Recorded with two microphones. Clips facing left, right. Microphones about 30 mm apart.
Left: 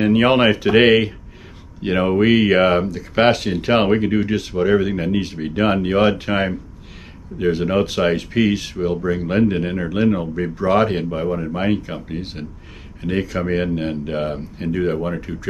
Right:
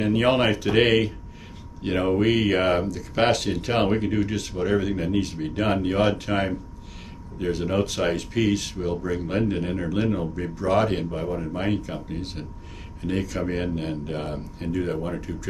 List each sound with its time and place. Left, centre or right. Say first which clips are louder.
0.0 s speech: left 6 dB; left